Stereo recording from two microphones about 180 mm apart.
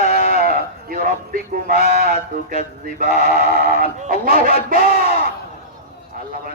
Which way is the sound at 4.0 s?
50° right (ahead or behind).